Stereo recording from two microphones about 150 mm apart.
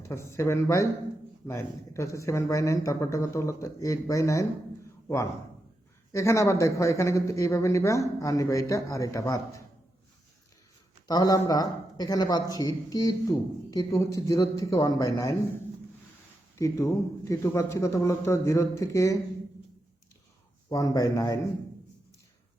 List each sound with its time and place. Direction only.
0.0 s a man's voice: 15° left (ahead or behind)
11.1 s a man's voice: 25° left (ahead or behind)
16.6 s a man's voice: 20° left (ahead or behind)
20.7 s a man's voice: 25° left (ahead or behind)